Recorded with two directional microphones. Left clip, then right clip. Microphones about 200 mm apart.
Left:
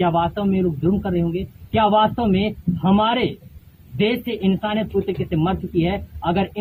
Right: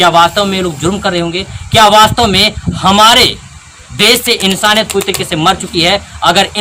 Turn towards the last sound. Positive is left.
turn(degrees=-20)  # may be behind; listen again after turning